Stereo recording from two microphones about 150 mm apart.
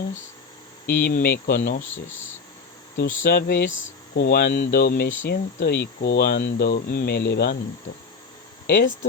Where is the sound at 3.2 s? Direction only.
85° left.